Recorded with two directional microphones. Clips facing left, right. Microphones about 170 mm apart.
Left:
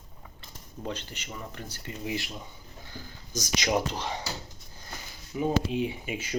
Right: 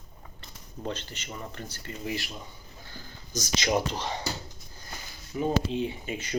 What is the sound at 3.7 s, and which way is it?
Speech, 5° left (ahead or behind).